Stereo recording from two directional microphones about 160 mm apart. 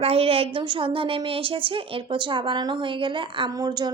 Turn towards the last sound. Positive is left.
turn(degrees=-25)  # may be behind; listen again after turning